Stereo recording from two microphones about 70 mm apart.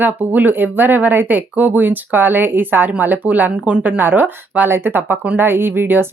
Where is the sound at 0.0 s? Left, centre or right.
Right.